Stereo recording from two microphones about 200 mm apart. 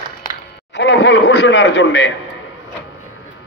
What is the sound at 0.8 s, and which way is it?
A man's voice, 65° left (ahead or behind).